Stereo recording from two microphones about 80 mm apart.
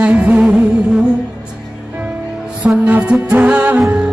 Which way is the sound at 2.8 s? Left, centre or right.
Centre.